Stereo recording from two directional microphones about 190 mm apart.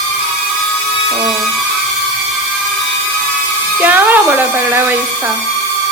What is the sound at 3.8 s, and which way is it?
Speech, 10° right (ahead or behind).